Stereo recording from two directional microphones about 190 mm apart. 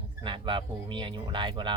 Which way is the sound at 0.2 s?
25° right (ahead or behind).